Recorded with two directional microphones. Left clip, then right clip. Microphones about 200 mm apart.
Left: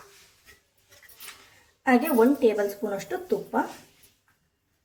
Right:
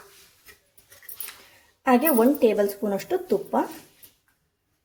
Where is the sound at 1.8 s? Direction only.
35° right (ahead or behind).